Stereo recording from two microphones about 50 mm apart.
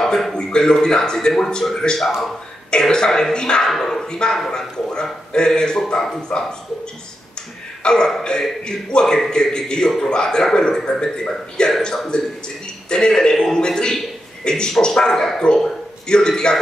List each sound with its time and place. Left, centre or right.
0.0 s a man's voice: centre
7.8 s a man's voice: centre